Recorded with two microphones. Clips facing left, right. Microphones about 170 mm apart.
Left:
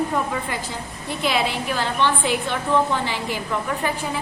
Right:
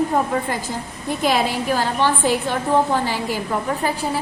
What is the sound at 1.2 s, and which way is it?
A woman's voice, 45° right (ahead or behind).